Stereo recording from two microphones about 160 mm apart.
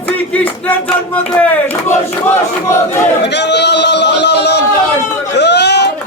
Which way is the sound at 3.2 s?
90° left.